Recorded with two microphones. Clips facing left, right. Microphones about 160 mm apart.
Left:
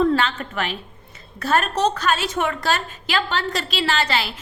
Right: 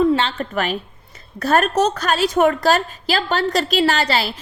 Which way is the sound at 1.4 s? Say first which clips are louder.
Right 4 dB; 45° right (ahead or behind).